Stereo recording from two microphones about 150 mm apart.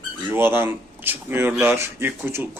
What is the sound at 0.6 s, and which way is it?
Speech, 15° right (ahead or behind).